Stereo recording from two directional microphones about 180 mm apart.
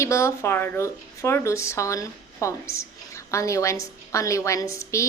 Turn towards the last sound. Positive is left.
turn(degrees=15)  # may be behind; listen again after turning